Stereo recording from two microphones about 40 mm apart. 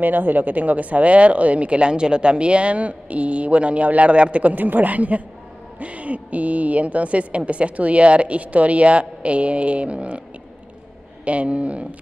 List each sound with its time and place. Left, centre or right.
0.0 s speech: right
11.2 s speech: right